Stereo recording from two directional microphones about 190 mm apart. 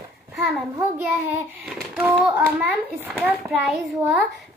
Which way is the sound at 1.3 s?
5° right (ahead or behind).